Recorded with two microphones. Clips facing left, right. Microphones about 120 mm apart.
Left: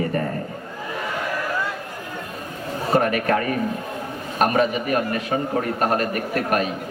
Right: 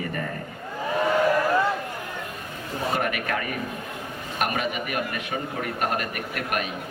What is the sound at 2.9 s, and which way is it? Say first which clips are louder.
A man's voice: left 11 dB; 40° left (ahead or behind).